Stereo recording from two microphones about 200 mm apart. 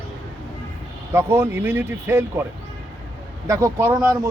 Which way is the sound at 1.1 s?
10° right (ahead or behind).